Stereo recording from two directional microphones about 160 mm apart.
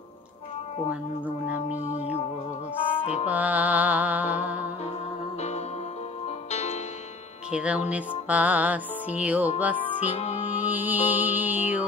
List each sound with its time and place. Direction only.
0.8 s speech: 10° right (ahead or behind)
1.7 s music: 45° left (ahead or behind)
3.3 s music: 10° right (ahead or behind)
6.5 s music: 40° left (ahead or behind)
7.5 s music: 10° right (ahead or behind)
10.1 s music: 45° left (ahead or behind)
10.5 s music: 10° right (ahead or behind)